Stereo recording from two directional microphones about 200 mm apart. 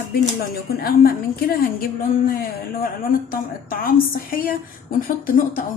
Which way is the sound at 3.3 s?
45° left (ahead or behind).